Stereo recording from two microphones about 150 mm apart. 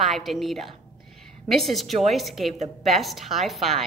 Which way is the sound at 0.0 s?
Centre (ahead or behind).